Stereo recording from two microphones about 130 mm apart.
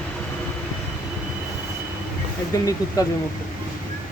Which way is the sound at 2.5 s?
30° left (ahead or behind).